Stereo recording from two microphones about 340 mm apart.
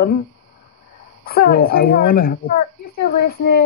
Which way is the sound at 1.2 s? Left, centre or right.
Left.